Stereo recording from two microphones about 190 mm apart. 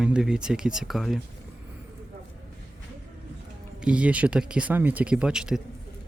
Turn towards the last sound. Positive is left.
turn(degrees=-5)  # may be behind; listen again after turning